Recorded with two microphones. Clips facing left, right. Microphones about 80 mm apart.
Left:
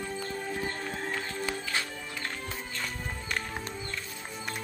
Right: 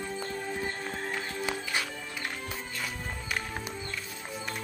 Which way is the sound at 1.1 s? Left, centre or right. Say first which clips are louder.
Right 1 dB; centre.